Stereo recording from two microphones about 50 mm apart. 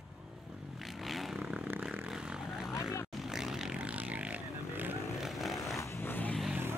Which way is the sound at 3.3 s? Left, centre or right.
Centre.